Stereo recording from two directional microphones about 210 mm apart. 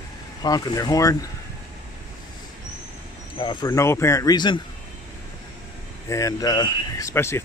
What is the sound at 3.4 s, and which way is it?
Speech, 20° left (ahead or behind).